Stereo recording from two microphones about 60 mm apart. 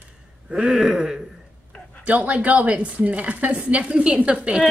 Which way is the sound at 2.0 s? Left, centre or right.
Right.